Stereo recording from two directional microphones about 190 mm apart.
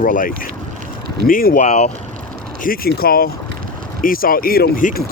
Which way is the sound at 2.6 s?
50° left (ahead or behind).